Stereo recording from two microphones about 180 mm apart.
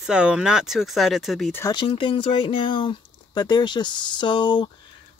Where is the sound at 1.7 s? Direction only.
25° left (ahead or behind).